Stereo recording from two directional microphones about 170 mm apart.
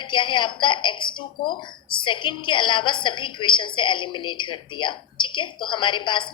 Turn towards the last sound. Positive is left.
turn(degrees=30)  # may be behind; listen again after turning